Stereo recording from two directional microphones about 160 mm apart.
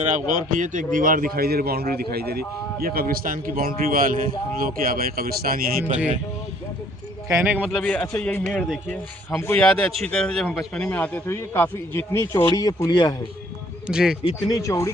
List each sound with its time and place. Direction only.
0.0 s a man's voice: 50° right (ahead or behind); by 2.4 s 75° right (ahead or behind)
2.8 s a man's voice: 65° right (ahead or behind)
5.8 s speech: 10° right (ahead or behind)
7.5 s a man's voice: 5° right (ahead or behind)
7.8 s a man's voice: 10° left (ahead or behind); by 13.1 s 25° left (ahead or behind)
13.8 s a man's voice: 5° right (ahead or behind)
14.3 s speech: 25° left (ahead or behind)